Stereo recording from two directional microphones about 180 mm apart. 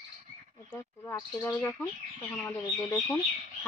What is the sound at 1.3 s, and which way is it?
Speech, 10° left (ahead or behind).